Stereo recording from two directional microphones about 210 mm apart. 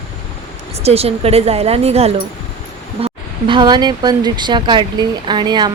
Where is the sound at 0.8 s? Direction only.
30° right (ahead or behind).